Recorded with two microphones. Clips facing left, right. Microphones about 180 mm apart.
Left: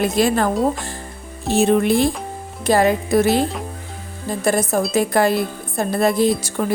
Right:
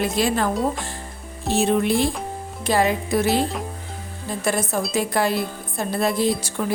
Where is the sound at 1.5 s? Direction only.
50° left (ahead or behind).